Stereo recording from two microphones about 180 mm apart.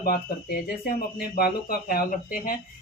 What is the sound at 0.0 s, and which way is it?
A woman's voice, 55° left (ahead or behind).